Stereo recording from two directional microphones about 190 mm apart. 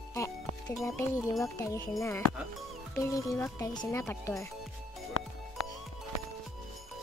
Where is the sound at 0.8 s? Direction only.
5° left (ahead or behind).